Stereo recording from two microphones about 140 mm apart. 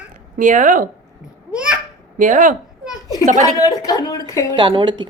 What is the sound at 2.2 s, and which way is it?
Speech, 70° right (ahead or behind).